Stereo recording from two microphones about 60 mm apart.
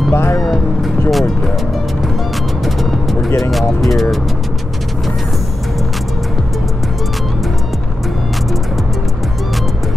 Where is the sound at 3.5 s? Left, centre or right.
Centre.